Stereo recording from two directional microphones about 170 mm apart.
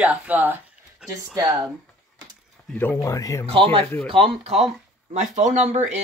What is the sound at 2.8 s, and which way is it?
Speech, 15° left (ahead or behind).